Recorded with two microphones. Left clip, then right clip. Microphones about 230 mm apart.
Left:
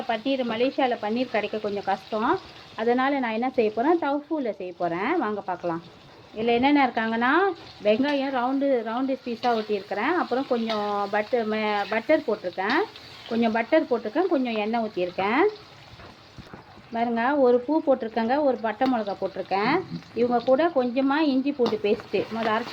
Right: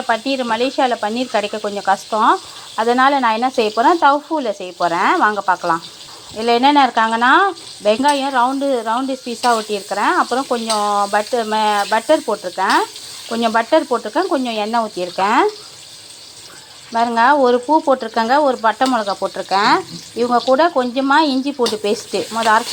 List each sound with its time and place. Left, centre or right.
0.1 s speech: right
16.9 s speech: centre